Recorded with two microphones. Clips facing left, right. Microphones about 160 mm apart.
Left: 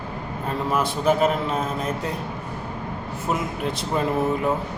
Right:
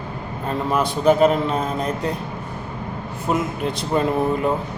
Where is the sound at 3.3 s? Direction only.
Centre (ahead or behind).